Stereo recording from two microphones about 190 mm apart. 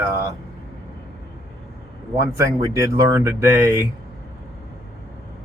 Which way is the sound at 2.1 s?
15° right (ahead or behind).